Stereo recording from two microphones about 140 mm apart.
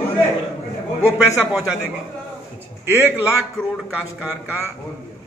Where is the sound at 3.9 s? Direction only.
10° right (ahead or behind).